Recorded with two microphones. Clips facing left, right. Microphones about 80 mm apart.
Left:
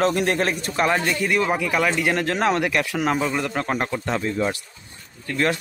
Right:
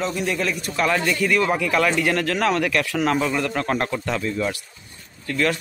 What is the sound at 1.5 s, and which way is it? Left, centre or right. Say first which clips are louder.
Speech: right 1 dB; centre.